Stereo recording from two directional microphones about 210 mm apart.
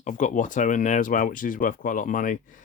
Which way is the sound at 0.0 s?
35° left (ahead or behind).